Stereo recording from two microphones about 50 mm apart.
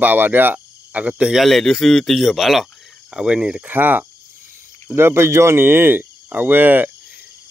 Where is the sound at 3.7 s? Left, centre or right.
Right.